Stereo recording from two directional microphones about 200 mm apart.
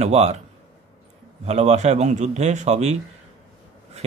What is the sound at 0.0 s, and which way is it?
Speech, 35° right (ahead or behind).